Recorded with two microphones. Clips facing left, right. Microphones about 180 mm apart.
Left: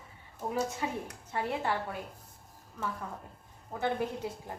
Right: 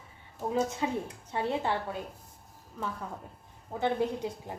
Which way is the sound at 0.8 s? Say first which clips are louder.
Right 4 dB; 20° right (ahead or behind).